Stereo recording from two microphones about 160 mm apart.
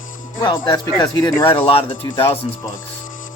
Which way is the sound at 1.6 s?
35° left (ahead or behind).